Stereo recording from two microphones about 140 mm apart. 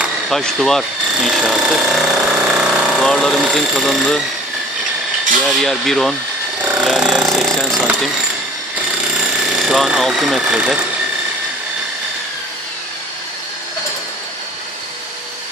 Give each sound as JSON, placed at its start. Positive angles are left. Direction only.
{"t": 0.0, "sound": "a sound", "side_deg": 0}
{"t": 3.1, "sound": "speech", "side_deg": 0}
{"t": 5.6, "sound": "speech", "side_deg": 0}
{"t": 6.7, "sound": "jackhammer", "side_deg": -5}
{"t": 9.5, "sound": "speech", "side_deg": -5}